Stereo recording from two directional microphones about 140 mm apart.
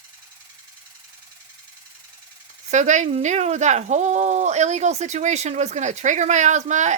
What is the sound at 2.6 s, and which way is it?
Speech, 60° right (ahead or behind).